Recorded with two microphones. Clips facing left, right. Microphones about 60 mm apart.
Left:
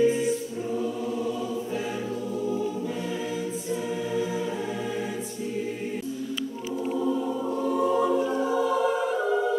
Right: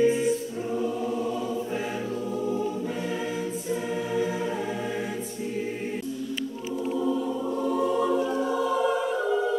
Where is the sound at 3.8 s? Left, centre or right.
Right.